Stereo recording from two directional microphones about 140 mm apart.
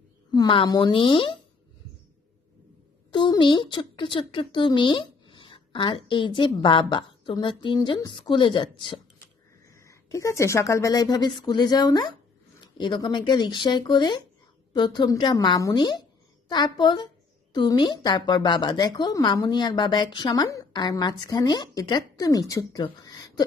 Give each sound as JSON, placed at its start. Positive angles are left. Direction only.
{"t": 0.3, "sound": "a woman's voice", "side_deg": 35}
{"t": 3.1, "sound": "speech", "side_deg": 35}
{"t": 9.7, "sound": "a woman's voice", "side_deg": 20}
{"t": 22.9, "sound": "a sound", "side_deg": 25}